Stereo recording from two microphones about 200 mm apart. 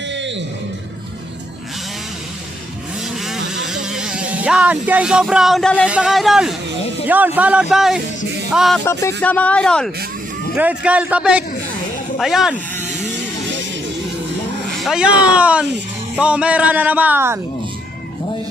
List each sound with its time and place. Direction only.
0.1 s music: 65° right (ahead or behind)
3.2 s vehicle: centre (ahead or behind)
5.9 s speech: 5° right (ahead or behind)
8.8 s speech: 15° left (ahead or behind)
10.5 s speech: 5° right (ahead or behind)
14.8 s speech: centre (ahead or behind)